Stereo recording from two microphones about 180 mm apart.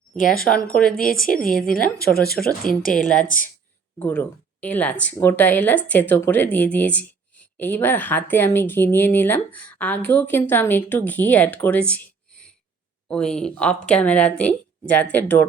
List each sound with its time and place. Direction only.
0.9 s a woman's voice: 50° left (ahead or behind)
2.9 s speech: 5° left (ahead or behind)
3.2 s a woman's voice: 50° left (ahead or behind)
3.9 s a woman's voice: 10° left (ahead or behind)